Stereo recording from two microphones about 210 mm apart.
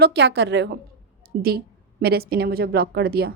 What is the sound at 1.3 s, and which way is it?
A woman's voice, 45° right (ahead or behind).